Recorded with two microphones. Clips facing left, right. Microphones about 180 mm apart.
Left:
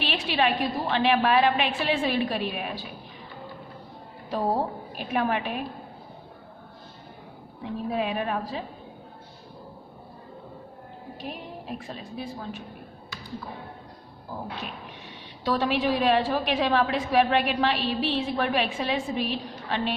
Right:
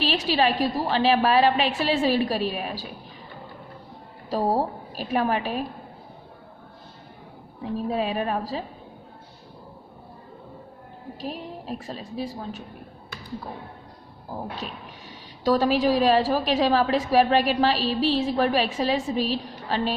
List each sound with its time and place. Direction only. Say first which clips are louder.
0.0 s a woman's voice: right 3 dB; 35° right (ahead or behind)
4.3 s a woman's voice: right 3 dB; 35° right (ahead or behind)
7.6 s a woman's voice: right 2 dB; 35° right (ahead or behind)
11.8 s a woman's voice: right 4 dB; 35° right (ahead or behind)
15.4 s a woman's voice: right 4 dB; 40° right (ahead or behind)